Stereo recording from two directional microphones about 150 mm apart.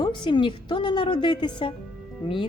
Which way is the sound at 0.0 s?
30° left (ahead or behind).